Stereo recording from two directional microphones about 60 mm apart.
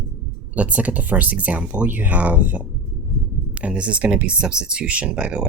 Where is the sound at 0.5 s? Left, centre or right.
Right.